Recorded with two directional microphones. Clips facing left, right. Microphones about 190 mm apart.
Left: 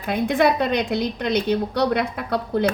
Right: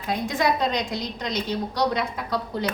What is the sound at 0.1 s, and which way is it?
A woman's voice, 60° left (ahead or behind).